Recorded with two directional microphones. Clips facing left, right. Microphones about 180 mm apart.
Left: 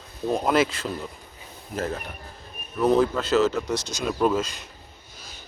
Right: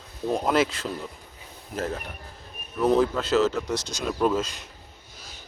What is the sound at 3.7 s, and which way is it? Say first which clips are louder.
Speech: left 1 dB; 15° left (ahead or behind).